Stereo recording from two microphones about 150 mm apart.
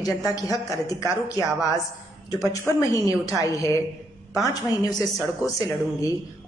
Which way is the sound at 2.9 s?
25° left (ahead or behind).